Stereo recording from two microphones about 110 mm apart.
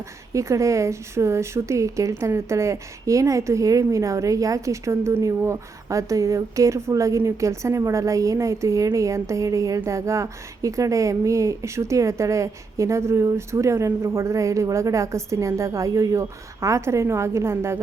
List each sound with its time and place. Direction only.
0.3 s a woman's voice: 30° right (ahead or behind)